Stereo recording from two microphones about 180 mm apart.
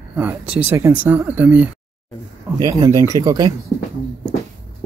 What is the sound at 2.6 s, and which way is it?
Speech, 20° right (ahead or behind).